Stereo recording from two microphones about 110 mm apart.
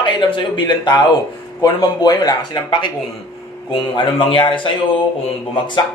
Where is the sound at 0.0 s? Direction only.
45° left (ahead or behind).